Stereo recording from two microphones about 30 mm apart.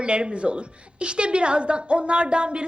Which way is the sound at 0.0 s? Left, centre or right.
Right.